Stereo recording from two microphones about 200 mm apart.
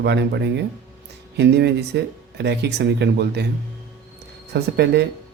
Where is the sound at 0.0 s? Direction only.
60° right (ahead or behind).